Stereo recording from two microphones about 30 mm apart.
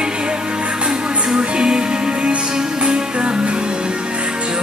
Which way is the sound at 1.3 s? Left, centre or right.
Right.